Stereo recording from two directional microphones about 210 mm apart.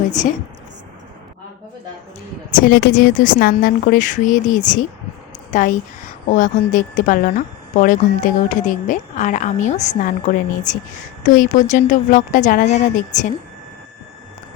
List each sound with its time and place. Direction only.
0.2 s a woman's voice: 35° left (ahead or behind)
2.5 s a woman's voice: 40° left (ahead or behind)